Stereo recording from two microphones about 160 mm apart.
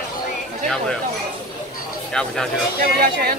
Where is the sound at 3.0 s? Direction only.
70° right (ahead or behind).